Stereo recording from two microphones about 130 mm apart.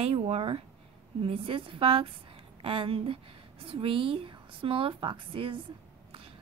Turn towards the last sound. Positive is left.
turn(degrees=-40)  # may be behind; listen again after turning